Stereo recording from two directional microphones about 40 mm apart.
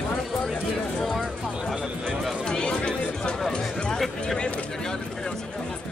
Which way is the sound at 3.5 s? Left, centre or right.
Left.